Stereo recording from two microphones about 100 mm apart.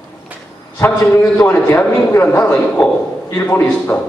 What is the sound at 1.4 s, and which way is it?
A man's voice, 25° left (ahead or behind).